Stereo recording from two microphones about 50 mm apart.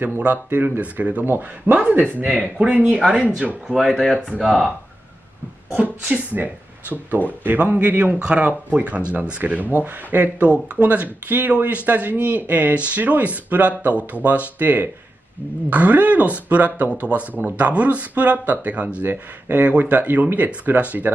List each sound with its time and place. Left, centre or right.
0.2 s speech: right
2.4 s speech: centre
2.7 s a man's voice: right
3.1 s a man's voice: centre
4.0 s speech: centre
4.4 s speech: centre
5.7 s a man's voice: right
19.4 s speech: right
19.7 s speech: right